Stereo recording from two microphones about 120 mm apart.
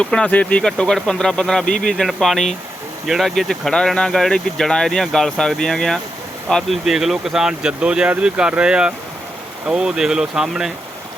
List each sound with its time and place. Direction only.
0.0 s speech: 10° left (ahead or behind)